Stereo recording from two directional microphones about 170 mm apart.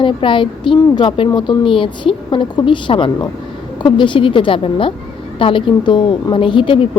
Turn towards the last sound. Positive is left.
turn(degrees=30)  # may be behind; listen again after turning